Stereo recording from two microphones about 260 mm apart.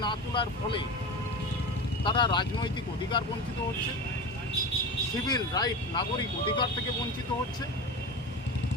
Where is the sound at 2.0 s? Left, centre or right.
Centre.